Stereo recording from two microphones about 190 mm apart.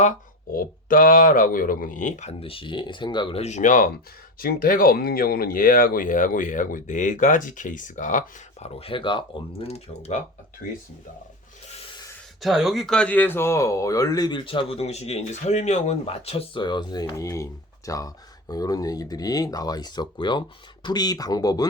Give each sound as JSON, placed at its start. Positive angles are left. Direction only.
{"t": 0.5, "sound": "speech", "side_deg": 45}
{"t": 12.4, "sound": "speech", "side_deg": 0}